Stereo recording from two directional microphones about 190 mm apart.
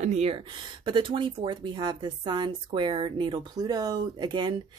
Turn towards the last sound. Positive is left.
turn(degrees=-25)  # may be behind; listen again after turning